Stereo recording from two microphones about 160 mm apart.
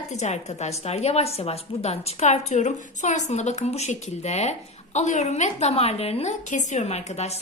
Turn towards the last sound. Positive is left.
turn(degrees=45)  # may be behind; listen again after turning